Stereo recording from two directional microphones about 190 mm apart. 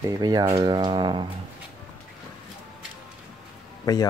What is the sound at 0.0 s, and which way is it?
Speech, 20° right (ahead or behind).